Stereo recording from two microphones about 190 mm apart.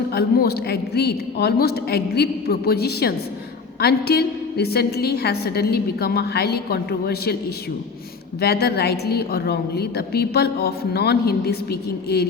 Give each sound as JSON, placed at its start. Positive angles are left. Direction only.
{"t": 0.1, "sound": "a woman's voice", "side_deg": 55}
{"t": 8.4, "sound": "a woman's voice", "side_deg": 55}